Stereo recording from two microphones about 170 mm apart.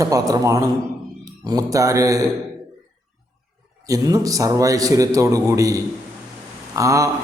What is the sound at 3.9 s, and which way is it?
A man's voice, 20° right (ahead or behind).